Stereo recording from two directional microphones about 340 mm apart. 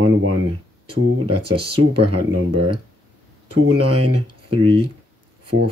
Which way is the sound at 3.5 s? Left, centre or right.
Right.